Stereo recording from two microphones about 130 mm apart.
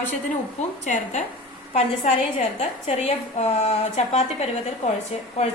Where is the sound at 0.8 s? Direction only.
65° left (ahead or behind).